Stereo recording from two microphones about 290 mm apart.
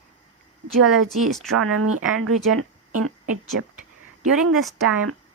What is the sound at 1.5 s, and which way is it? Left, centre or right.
Speech, right.